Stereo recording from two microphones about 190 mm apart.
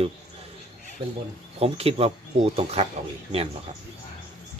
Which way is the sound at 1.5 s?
30° right (ahead or behind).